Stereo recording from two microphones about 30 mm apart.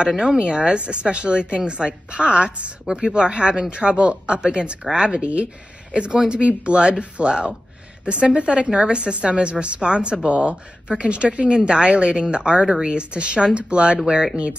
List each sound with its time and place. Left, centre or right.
0.4 s a woman's voice: right
1.9 s a woman's voice: right
6.4 s a woman's voice: right
8.6 s a woman's voice: right